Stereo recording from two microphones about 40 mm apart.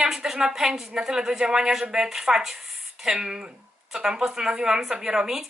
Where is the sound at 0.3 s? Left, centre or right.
Centre.